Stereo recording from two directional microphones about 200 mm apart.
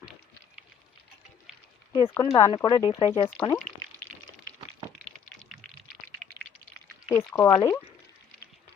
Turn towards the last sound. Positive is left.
turn(degrees=20)  # may be behind; listen again after turning